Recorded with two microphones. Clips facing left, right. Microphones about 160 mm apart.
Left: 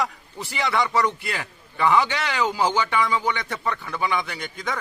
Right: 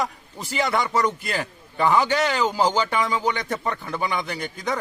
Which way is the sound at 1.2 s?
35° right (ahead or behind).